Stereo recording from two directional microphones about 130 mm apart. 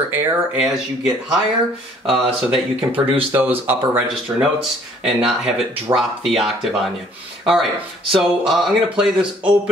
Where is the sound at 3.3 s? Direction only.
15° right (ahead or behind).